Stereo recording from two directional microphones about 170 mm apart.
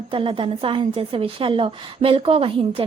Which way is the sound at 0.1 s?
30° right (ahead or behind).